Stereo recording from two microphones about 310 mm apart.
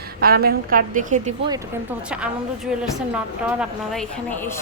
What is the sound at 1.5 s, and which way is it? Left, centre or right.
A woman's voice, centre.